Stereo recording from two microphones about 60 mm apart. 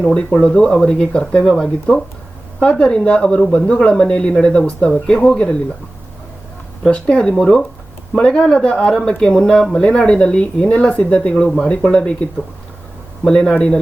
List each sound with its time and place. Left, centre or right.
0.0 s speech: centre
6.8 s speech: centre